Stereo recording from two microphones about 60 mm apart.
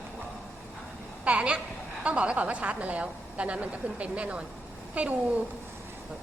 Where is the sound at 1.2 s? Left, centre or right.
Centre.